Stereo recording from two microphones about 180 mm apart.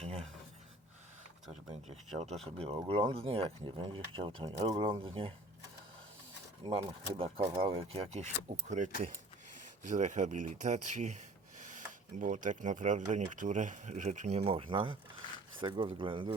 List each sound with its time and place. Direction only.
0.0 s cutlery: 35° right (ahead or behind)
2.0 s speech: 35° right (ahead or behind)
6.7 s speech: 35° right (ahead or behind)